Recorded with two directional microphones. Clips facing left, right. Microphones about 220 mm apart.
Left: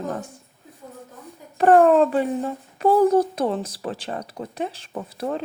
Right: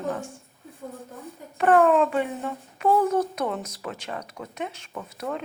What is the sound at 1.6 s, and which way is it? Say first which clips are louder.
A child's voice: left 4 dB; 35° left (ahead or behind).